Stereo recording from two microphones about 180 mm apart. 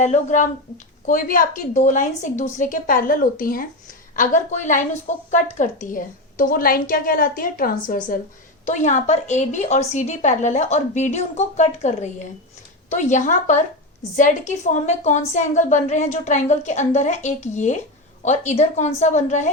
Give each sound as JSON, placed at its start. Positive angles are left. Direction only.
{"t": 0.0, "sound": "a woman's voice", "side_deg": 40}